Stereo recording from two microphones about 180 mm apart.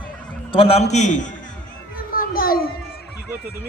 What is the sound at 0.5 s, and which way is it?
Speech, 30° left (ahead or behind).